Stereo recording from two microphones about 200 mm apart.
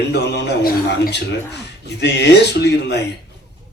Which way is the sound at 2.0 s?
55° left (ahead or behind).